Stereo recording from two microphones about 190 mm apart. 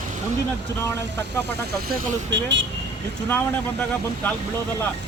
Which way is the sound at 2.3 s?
70° right (ahead or behind).